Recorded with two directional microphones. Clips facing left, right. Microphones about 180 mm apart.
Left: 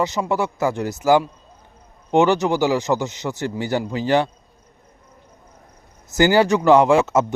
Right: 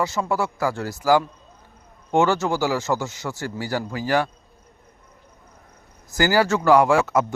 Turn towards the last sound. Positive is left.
turn(degrees=25)  # may be behind; listen again after turning